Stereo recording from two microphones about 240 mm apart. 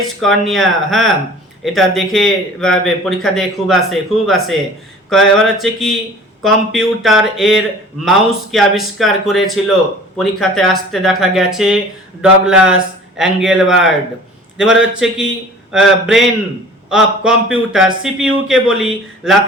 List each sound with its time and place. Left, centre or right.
0.2 s a man's voice: centre